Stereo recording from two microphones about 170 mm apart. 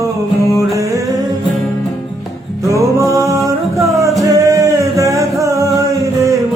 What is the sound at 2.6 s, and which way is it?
Music, 15° right (ahead or behind).